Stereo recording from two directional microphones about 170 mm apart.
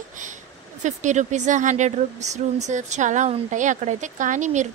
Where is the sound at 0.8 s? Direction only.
45° right (ahead or behind).